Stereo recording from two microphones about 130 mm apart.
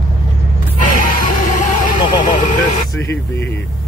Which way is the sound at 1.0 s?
75° left (ahead or behind).